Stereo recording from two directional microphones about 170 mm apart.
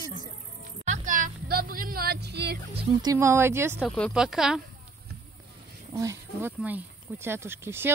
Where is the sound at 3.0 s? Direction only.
15° right (ahead or behind).